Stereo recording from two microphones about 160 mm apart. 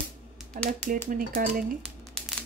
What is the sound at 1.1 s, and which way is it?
Speech, 60° right (ahead or behind).